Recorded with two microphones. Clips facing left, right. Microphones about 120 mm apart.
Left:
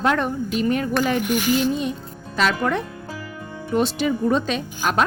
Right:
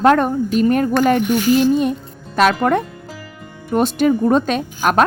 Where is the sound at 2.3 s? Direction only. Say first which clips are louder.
Right 6 dB; 55° right (ahead or behind).